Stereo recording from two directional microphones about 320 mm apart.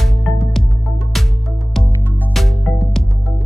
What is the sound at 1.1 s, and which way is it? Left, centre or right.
Music, centre.